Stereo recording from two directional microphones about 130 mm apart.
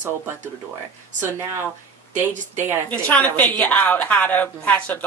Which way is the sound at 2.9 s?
10° left (ahead or behind).